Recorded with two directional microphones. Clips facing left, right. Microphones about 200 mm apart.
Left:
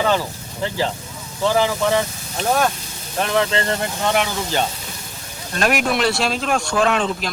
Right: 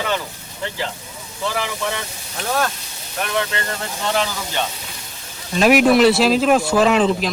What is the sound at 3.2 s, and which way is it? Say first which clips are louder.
Speech: left 4 dB; 30° left (ahead or behind).